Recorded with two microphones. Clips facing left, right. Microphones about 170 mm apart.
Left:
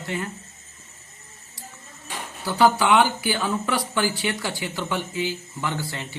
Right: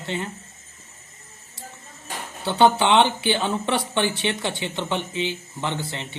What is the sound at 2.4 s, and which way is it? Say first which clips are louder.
Speech: right 1 dB; 25° right (ahead or behind).